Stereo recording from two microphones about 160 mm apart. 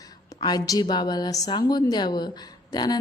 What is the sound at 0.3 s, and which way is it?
A woman's voice, 25° left (ahead or behind).